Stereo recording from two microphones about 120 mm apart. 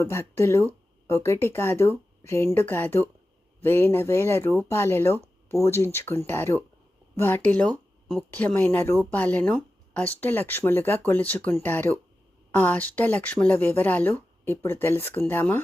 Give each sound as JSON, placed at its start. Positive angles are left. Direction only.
{"t": 0.0, "sound": "speech", "side_deg": 20}